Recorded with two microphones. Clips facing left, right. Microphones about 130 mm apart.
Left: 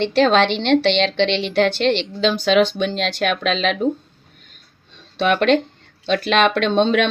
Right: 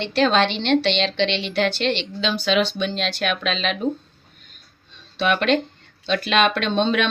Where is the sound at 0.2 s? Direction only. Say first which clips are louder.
Left 3 dB; 70° left (ahead or behind).